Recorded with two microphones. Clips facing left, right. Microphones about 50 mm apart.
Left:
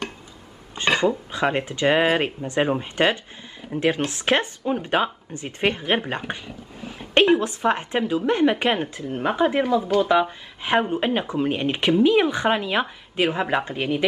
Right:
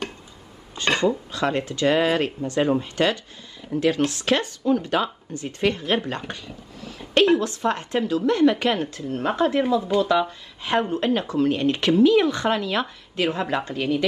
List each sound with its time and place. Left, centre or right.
0.8 s speech: centre